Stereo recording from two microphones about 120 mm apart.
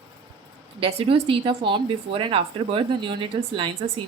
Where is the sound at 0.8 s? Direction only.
50° right (ahead or behind).